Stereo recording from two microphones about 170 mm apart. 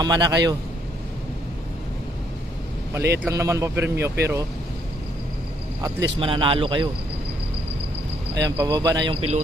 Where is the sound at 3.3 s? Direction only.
20° right (ahead or behind).